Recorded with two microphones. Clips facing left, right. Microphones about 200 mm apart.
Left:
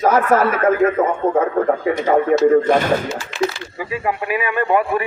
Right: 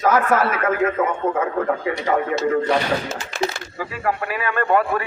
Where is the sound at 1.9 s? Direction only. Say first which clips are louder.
Left 6 dB; 45° left (ahead or behind).